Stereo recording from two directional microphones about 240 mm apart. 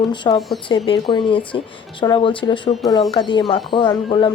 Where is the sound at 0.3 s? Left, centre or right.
Centre.